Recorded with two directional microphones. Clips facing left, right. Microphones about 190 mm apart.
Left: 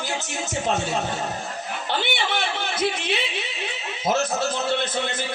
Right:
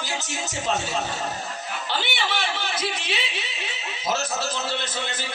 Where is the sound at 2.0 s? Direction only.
55° left (ahead or behind).